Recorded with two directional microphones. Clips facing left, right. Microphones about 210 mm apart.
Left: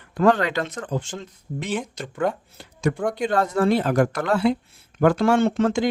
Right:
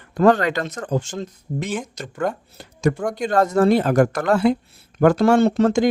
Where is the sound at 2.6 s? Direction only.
45° right (ahead or behind).